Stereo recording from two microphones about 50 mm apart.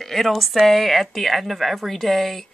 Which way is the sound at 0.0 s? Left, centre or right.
Centre.